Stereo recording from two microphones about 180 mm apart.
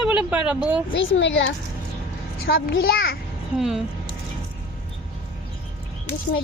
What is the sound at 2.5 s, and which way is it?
Speech, 75° left (ahead or behind).